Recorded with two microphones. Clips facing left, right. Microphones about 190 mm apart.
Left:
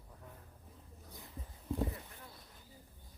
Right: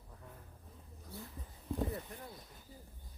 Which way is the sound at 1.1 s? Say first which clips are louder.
Right 7 dB; 15° left (ahead or behind).